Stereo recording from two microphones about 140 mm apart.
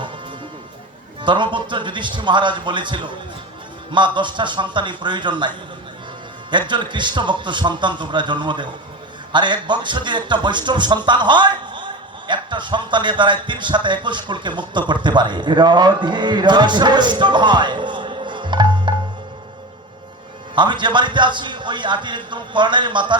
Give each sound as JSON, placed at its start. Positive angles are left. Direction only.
{"t": 1.2, "sound": "a man's voice", "side_deg": -35}
{"t": 20.6, "sound": "a man's voice", "side_deg": -35}